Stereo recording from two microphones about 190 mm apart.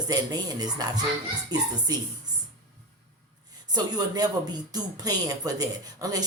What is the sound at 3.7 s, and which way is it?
A woman's voice, 20° right (ahead or behind).